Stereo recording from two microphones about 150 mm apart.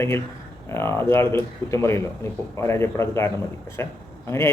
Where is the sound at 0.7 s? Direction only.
15° left (ahead or behind).